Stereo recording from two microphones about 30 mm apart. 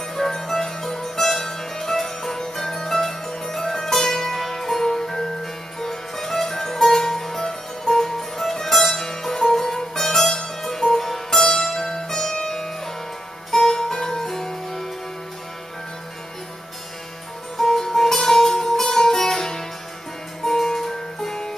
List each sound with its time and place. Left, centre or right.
0.1 s music: centre
11.3 s music: centre
17.6 s music: centre